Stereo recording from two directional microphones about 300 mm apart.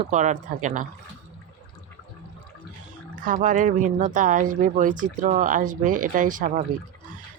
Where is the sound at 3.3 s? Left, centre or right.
Right.